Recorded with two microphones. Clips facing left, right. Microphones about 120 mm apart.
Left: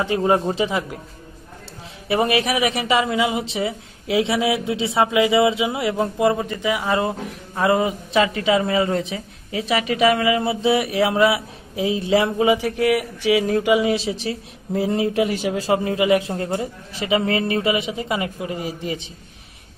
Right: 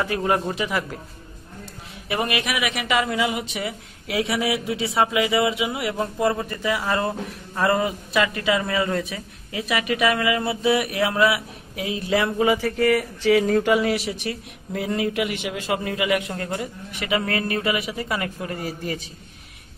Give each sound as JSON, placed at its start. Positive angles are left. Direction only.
{"t": 0.0, "sound": "speech", "side_deg": 25}
{"t": 2.0, "sound": "speech", "side_deg": 30}
{"t": 13.9, "sound": "speech", "side_deg": 30}